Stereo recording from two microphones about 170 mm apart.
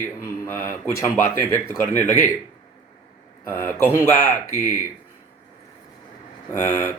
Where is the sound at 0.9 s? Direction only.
20° left (ahead or behind).